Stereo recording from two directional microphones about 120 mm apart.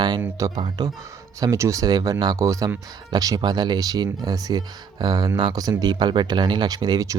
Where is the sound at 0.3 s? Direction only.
30° right (ahead or behind).